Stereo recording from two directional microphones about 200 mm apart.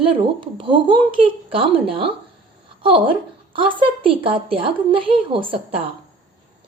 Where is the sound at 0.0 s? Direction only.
25° right (ahead or behind).